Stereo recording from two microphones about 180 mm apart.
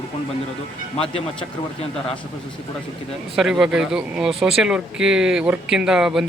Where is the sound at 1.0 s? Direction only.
30° left (ahead or behind).